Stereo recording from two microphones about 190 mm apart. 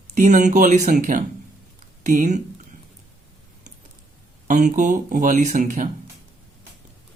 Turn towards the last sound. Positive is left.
turn(degrees=-40)  # may be behind; listen again after turning